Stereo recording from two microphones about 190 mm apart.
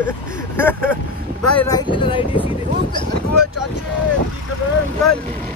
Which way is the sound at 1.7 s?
25° left (ahead or behind).